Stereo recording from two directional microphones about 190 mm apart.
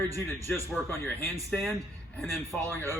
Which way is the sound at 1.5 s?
Centre (ahead or behind).